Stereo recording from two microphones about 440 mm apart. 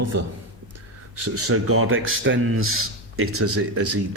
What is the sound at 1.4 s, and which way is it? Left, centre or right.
A man's voice, right.